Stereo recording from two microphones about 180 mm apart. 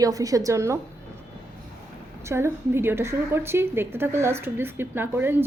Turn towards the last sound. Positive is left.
turn(degrees=-10)  # may be behind; listen again after turning